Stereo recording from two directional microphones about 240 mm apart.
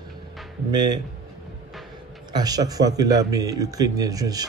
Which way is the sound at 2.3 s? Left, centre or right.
Centre.